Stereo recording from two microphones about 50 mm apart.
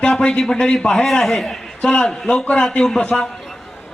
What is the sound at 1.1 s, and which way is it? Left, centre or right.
A man's voice, centre.